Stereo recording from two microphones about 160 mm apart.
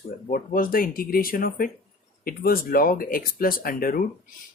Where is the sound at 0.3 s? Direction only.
60° left (ahead or behind).